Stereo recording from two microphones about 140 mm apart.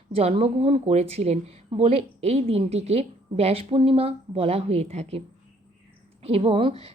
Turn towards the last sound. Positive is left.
turn(degrees=-45)  # may be behind; listen again after turning